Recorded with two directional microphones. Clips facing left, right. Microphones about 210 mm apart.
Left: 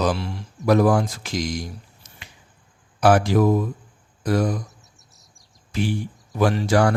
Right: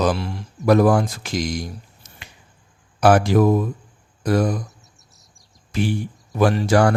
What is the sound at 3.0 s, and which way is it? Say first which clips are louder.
Speech: right 2 dB; 55° right (ahead or behind).